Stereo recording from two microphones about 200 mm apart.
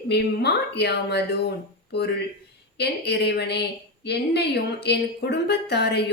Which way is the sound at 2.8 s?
55° left (ahead or behind).